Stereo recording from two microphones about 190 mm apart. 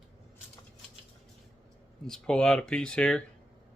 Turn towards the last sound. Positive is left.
turn(degrees=5)  # may be behind; listen again after turning